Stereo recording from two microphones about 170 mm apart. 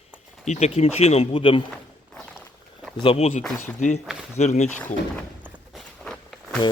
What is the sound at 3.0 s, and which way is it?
Speech, 35° left (ahead or behind).